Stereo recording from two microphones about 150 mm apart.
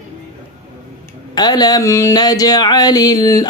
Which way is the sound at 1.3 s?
25° left (ahead or behind).